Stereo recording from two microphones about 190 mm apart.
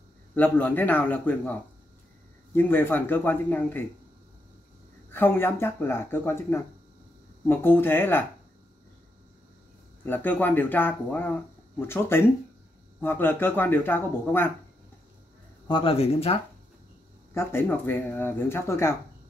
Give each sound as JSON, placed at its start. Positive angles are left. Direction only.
{"t": 0.3, "sound": "speech", "side_deg": 10}
{"t": 5.1, "sound": "speech", "side_deg": 10}
{"t": 10.0, "sound": "speech", "side_deg": 10}
{"t": 15.7, "sound": "speech", "side_deg": 30}
{"t": 17.3, "sound": "speech", "side_deg": 15}